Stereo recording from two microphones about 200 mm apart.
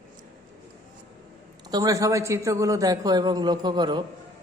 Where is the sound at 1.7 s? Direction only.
15° right (ahead or behind).